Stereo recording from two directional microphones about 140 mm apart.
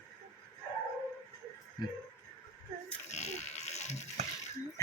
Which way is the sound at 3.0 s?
55° left (ahead or behind).